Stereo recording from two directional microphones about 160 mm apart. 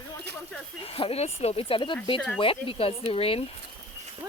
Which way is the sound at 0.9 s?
40° left (ahead or behind).